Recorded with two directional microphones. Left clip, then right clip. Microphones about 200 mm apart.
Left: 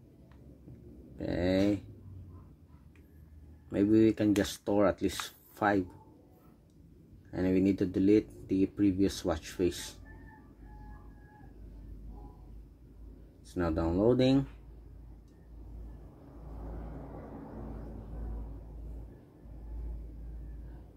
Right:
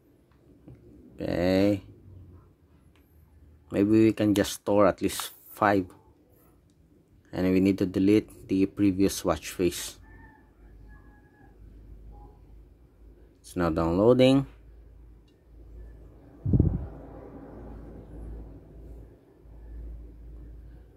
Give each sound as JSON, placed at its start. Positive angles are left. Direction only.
{"t": 1.1, "sound": "speech", "side_deg": -30}
{"t": 3.6, "sound": "speech", "side_deg": -25}
{"t": 7.2, "sound": "speech", "side_deg": -30}
{"t": 13.5, "sound": "speech", "side_deg": -30}